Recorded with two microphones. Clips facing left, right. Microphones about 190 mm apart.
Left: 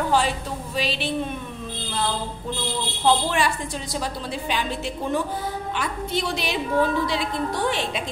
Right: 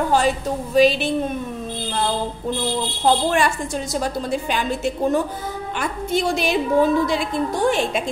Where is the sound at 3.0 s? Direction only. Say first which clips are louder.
Right 3 dB; 50° right (ahead or behind).